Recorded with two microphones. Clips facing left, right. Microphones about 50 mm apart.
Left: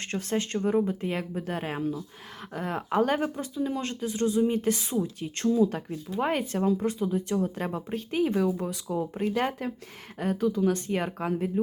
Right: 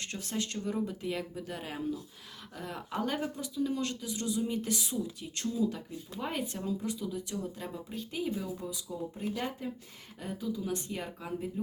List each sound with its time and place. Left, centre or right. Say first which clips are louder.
0.0 s speech: left 7 dB; left
5.5 s speech: left 7 dB; left